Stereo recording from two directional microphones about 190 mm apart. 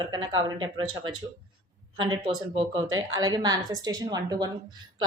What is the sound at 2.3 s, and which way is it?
A woman's voice, 25° right (ahead or behind).